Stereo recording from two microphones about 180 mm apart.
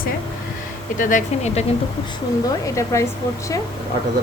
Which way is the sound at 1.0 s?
45° left (ahead or behind).